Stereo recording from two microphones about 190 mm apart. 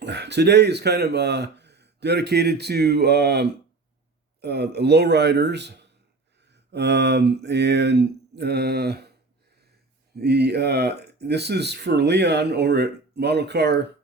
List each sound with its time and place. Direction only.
0.0 s speech: 65° right (ahead or behind)
10.2 s speech: 60° right (ahead or behind)